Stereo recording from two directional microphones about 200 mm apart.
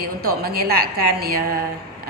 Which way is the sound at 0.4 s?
50° right (ahead or behind).